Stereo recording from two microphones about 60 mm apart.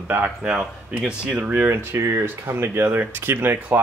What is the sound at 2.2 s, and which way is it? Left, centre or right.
Speech, right.